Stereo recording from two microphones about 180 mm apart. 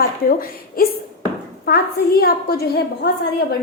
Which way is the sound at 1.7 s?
60° left (ahead or behind).